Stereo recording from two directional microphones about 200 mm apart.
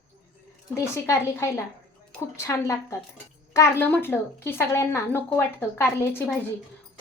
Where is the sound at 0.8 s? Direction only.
15° left (ahead or behind).